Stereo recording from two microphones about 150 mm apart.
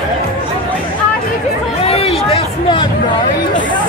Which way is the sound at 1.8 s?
40° left (ahead or behind).